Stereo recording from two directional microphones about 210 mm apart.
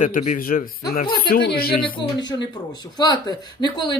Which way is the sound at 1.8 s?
25° left (ahead or behind).